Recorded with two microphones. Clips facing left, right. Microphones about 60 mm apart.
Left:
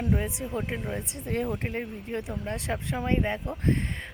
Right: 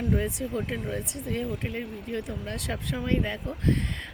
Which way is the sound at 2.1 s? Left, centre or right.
Left.